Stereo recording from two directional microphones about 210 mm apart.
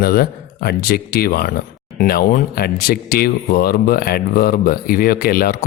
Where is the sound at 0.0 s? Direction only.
45° left (ahead or behind).